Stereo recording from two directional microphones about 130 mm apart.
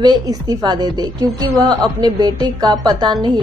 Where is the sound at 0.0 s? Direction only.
30° right (ahead or behind).